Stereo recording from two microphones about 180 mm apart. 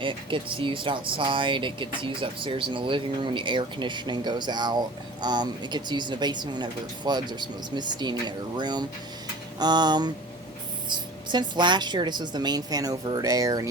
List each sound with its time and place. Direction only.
0.0 s speech: 30° right (ahead or behind)